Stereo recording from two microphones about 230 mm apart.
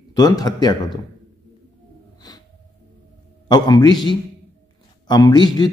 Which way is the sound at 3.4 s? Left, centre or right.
Centre.